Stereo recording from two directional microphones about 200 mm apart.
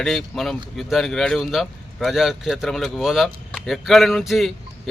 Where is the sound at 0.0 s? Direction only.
Centre (ahead or behind).